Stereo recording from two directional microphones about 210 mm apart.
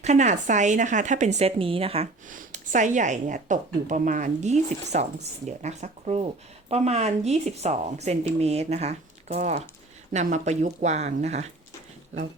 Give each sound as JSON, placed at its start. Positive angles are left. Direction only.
{"t": 0.0, "sound": "a woman's voice", "side_deg": -35}